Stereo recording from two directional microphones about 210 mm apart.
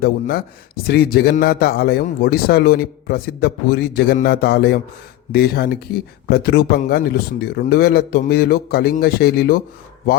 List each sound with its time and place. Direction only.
0.0 s speech: 45° left (ahead or behind)